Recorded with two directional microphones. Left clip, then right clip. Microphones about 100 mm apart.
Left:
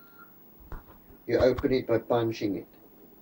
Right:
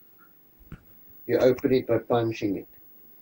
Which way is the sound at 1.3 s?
40° right (ahead or behind).